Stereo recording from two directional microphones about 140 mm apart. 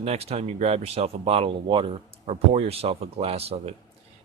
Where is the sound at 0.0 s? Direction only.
45° right (ahead or behind).